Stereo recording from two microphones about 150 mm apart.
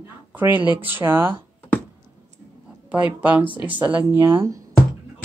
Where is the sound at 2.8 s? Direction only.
10° right (ahead or behind).